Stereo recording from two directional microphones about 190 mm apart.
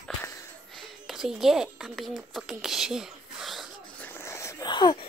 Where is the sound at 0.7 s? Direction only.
Centre (ahead or behind).